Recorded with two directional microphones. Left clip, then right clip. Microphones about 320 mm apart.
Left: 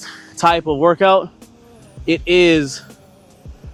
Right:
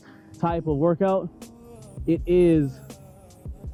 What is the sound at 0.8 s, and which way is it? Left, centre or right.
Speech, centre.